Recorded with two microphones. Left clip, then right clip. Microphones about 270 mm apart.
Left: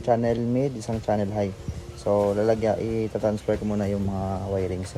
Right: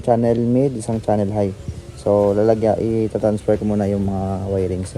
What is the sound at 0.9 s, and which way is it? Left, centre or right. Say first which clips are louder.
Speech: right 6 dB; right.